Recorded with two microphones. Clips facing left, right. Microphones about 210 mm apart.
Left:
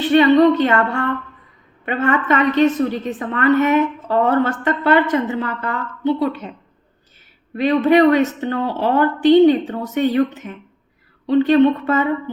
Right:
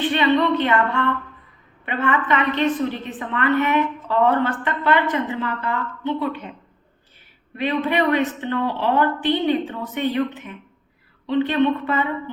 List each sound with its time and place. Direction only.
0.0 s a woman's voice: 40° left (ahead or behind)
7.5 s a woman's voice: 40° left (ahead or behind)